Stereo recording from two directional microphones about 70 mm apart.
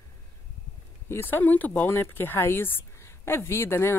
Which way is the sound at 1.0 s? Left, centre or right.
Left.